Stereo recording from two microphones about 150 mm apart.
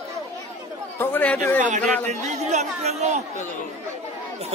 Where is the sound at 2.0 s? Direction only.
50° right (ahead or behind).